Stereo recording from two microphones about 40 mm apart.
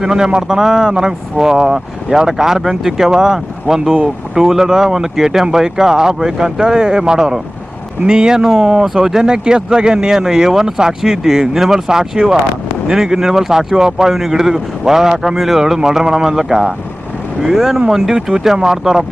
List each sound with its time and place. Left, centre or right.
0.0 s speech: centre